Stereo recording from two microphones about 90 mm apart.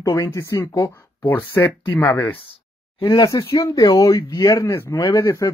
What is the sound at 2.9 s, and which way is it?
Speech, 55° left (ahead or behind).